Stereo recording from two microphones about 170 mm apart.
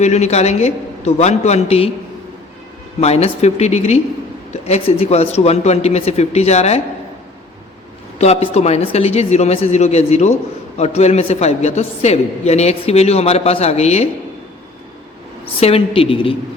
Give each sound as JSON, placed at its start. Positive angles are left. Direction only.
{"t": 0.0, "sound": "a woman's voice", "side_deg": 40}
{"t": 3.0, "sound": "a woman's voice", "side_deg": 40}
{"t": 8.2, "sound": "a woman's voice", "side_deg": 35}
{"t": 15.6, "sound": "a woman's voice", "side_deg": 35}